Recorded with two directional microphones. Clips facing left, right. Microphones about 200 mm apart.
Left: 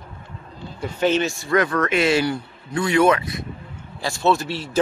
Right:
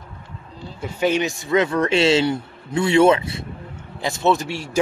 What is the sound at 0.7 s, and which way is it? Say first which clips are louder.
Speech: even; 10° right (ahead or behind).